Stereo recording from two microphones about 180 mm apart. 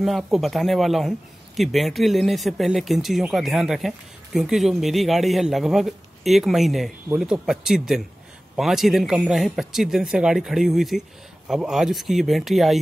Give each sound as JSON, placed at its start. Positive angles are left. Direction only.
{"t": 0.0, "sound": "speech", "side_deg": 0}